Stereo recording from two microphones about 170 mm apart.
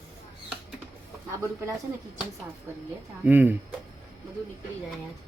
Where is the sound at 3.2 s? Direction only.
10° right (ahead or behind).